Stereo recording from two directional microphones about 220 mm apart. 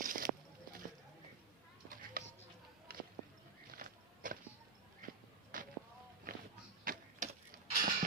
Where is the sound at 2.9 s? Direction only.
45° right (ahead or behind).